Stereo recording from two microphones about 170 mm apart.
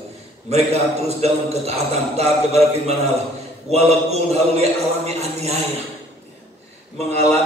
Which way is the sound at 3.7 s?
40° right (ahead or behind).